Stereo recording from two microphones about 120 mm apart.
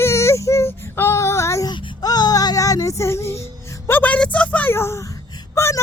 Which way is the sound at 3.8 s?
15° left (ahead or behind).